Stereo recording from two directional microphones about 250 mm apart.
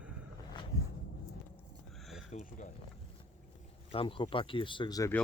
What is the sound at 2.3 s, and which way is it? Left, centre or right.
Speech, left.